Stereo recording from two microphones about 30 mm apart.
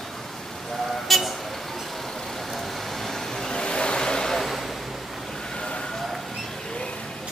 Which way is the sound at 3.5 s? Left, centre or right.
Left.